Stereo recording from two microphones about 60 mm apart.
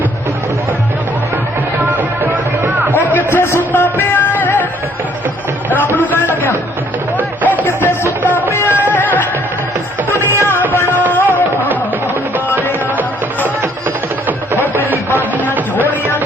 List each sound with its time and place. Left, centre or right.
2.0 s music: right
3.2 s a sound: left
3.6 s music: left
5.7 s a sound: left
7.2 s music: left
13.0 s music: right
15.7 s music: left